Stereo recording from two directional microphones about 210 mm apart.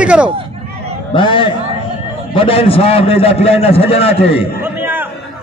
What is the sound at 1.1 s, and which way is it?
A man's voice, 25° left (ahead or behind).